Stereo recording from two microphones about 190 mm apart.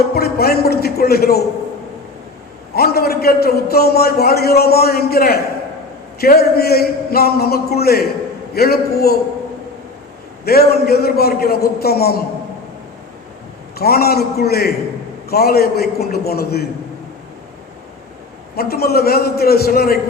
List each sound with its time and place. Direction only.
0.1 s a man's voice: 55° left (ahead or behind)
2.7 s a man's voice: 55° left (ahead or behind)
10.4 s a man's voice: 55° left (ahead or behind)
13.7 s a man's voice: 55° left (ahead or behind)
18.5 s a man's voice: 55° left (ahead or behind)